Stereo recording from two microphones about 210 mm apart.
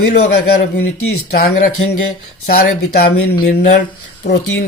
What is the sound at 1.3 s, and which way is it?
Speech, 50° left (ahead or behind).